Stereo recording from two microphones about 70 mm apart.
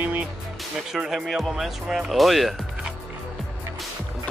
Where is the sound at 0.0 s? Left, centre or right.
Right.